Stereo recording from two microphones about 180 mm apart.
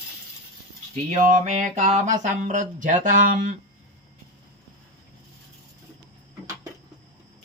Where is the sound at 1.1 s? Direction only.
45° right (ahead or behind).